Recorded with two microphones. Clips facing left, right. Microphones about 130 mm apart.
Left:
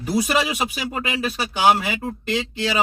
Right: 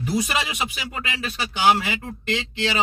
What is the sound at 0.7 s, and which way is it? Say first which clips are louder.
Speech: left 5 dB; 30° left (ahead or behind).